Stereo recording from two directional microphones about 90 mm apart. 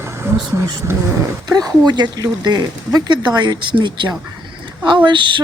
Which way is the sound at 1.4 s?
50° right (ahead or behind).